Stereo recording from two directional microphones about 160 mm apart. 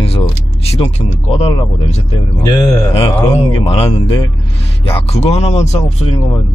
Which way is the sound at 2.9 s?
35° left (ahead or behind).